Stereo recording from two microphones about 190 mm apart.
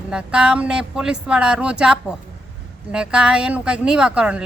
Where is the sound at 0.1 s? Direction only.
5° right (ahead or behind).